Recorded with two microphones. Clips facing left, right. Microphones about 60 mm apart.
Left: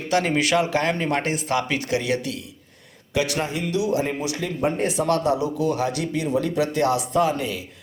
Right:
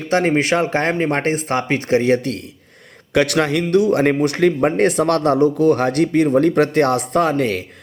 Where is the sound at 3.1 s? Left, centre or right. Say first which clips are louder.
Right 8 dB; right.